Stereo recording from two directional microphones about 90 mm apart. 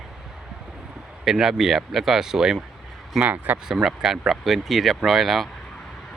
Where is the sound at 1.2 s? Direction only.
5° right (ahead or behind).